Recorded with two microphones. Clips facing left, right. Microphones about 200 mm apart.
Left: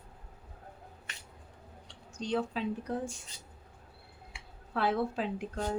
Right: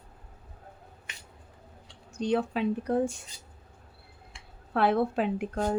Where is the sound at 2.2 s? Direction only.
60° right (ahead or behind).